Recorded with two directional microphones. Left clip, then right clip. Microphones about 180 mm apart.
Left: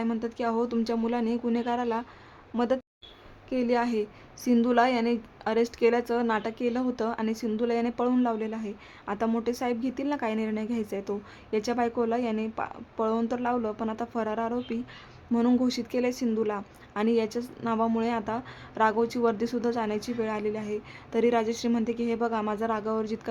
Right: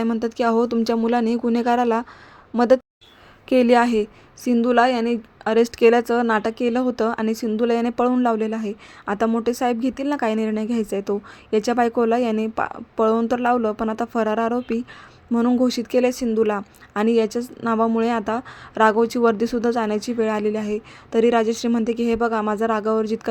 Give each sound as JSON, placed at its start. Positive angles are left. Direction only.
{"t": 0.0, "sound": "a woman's voice", "side_deg": -35}
{"t": 4.6, "sound": "a woman's voice", "side_deg": -25}
{"t": 15.3, "sound": "speech", "side_deg": -20}
{"t": 15.5, "sound": "a woman's voice", "side_deg": -30}